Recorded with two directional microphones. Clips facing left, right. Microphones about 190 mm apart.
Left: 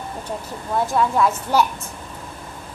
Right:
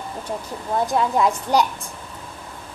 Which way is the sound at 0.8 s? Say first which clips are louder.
Left 1 dB; 20° right (ahead or behind).